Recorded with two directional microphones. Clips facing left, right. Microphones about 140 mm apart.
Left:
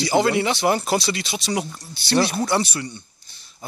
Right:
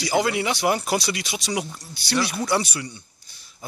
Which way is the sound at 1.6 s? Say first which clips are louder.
Left 2 dB; 35° left (ahead or behind).